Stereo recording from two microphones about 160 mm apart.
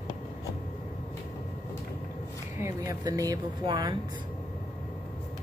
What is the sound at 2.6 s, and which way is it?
Speech, 20° right (ahead or behind).